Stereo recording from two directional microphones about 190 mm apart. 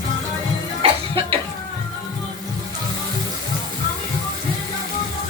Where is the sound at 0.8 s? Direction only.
25° right (ahead or behind).